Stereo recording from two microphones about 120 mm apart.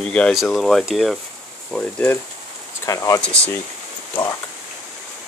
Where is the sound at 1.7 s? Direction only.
10° left (ahead or behind).